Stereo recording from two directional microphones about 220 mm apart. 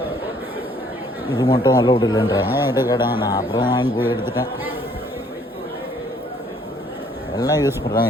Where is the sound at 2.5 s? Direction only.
10° right (ahead or behind).